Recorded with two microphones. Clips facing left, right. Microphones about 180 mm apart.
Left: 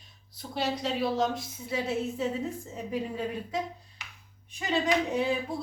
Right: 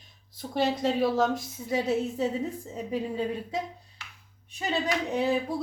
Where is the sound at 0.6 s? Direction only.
50° right (ahead or behind).